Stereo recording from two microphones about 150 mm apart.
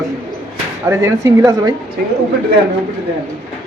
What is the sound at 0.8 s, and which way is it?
Speech, 20° right (ahead or behind).